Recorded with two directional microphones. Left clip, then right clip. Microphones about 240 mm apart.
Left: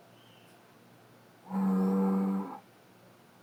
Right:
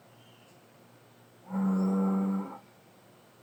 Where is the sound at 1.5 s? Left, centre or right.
Left.